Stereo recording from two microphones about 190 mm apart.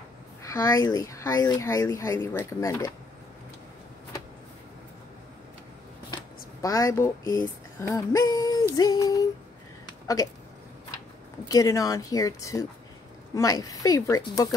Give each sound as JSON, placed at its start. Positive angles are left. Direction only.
{"t": 0.4, "sound": "speech", "side_deg": 15}
{"t": 6.6, "sound": "speech", "side_deg": 15}
{"t": 11.4, "sound": "speech", "side_deg": 15}